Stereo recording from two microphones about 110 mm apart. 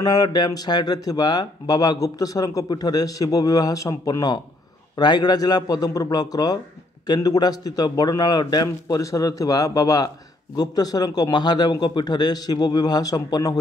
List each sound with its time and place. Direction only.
0.0 s a man's voice: 35° left (ahead or behind)